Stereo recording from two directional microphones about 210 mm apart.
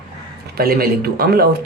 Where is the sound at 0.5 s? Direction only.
45° right (ahead or behind).